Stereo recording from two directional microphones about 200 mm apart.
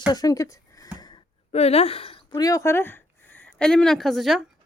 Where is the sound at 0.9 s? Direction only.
20° left (ahead or behind).